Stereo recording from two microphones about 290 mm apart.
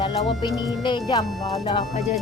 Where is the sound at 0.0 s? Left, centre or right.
Centre.